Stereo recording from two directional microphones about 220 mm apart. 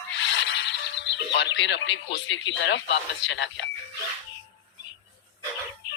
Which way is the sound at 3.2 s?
55° left (ahead or behind).